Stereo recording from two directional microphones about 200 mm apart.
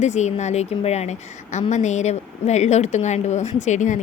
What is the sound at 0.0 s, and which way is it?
Speech, 35° left (ahead or behind).